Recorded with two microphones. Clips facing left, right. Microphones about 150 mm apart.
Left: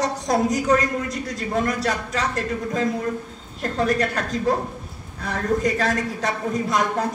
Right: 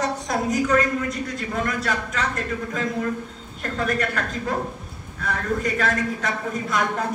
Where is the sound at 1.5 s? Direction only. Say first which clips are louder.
Left 4 dB; 35° left (ahead or behind).